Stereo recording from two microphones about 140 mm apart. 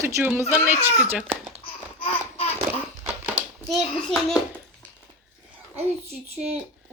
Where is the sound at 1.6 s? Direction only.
40° left (ahead or behind).